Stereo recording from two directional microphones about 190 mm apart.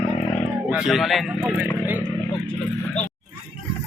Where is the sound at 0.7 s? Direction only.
Centre (ahead or behind).